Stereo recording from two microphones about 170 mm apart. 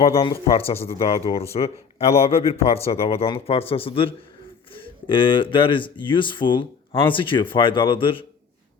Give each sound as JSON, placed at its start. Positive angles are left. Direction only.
{"t": 0.0, "sound": "speech", "side_deg": 35}